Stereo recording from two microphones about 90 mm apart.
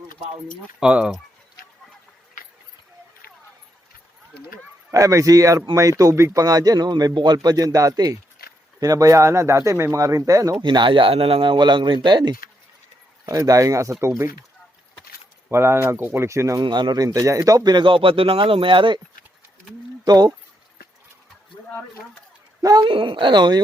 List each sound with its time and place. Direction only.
0.8 s speech: 10° right (ahead or behind)
4.9 s a man's voice: 35° right (ahead or behind)
10.6 s speech: 60° right (ahead or behind)
13.2 s a man's voice: 40° right (ahead or behind)
15.4 s speech: 30° right (ahead or behind)
16.6 s speech: 55° right (ahead or behind); by 18.9 s 70° right (ahead or behind)
20.1 s speech: 45° right (ahead or behind)
22.6 s a man's voice: 45° right (ahead or behind)
22.9 s speech: 70° right (ahead or behind)